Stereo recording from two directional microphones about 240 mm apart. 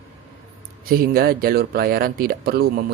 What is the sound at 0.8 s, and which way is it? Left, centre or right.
Speech, right.